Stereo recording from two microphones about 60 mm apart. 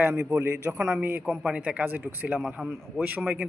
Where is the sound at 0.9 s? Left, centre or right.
Right.